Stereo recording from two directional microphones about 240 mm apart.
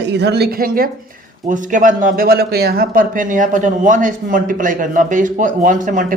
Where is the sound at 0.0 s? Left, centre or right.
Right.